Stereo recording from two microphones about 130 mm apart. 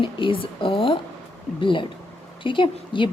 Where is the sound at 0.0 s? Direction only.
40° left (ahead or behind).